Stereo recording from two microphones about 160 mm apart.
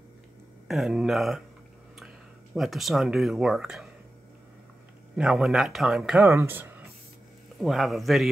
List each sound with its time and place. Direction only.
0.7 s speech: centre (ahead or behind)
5.1 s speech: 5° right (ahead or behind)
6.2 s speech: 15° right (ahead or behind)
7.6 s speech: centre (ahead or behind)